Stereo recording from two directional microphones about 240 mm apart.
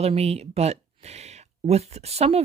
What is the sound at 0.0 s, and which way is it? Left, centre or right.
Speech, right.